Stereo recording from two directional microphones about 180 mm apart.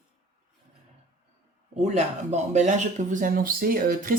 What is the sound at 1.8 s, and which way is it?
A woman's voice, 40° right (ahead or behind).